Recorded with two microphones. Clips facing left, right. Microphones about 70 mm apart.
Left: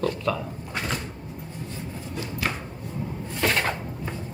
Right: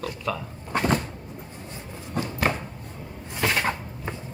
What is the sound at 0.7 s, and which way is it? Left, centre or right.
Cupboard open or close, right.